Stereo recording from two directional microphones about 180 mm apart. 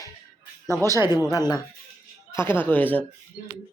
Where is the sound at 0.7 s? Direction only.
20° right (ahead or behind).